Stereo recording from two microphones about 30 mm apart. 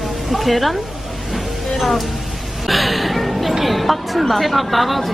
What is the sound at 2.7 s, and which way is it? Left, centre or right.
Music, centre.